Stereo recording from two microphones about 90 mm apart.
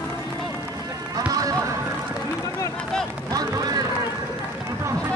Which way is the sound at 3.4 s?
45° right (ahead or behind).